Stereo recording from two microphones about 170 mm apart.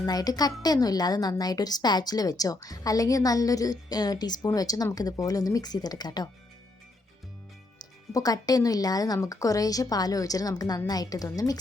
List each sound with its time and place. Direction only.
0.0 s a woman's voice: 20° left (ahead or behind)
8.1 s a woman's voice: 20° left (ahead or behind)